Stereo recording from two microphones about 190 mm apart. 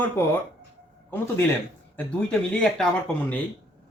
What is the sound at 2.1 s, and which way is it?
Speech, 5° left (ahead or behind).